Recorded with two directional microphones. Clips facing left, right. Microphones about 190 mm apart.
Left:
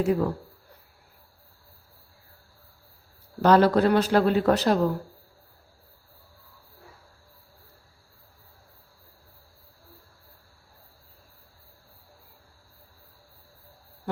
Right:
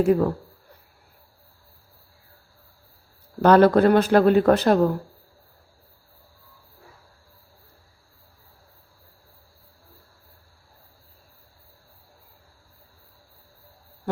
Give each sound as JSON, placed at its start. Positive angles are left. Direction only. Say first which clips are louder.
{"t": 0.0, "sound": "a man's voice", "louder": "right 5 dB", "side_deg": -55}
{"t": 3.4, "sound": "a man's voice", "louder": "right 4 dB", "side_deg": -55}